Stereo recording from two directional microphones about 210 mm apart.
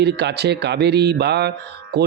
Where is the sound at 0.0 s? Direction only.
55° right (ahead or behind).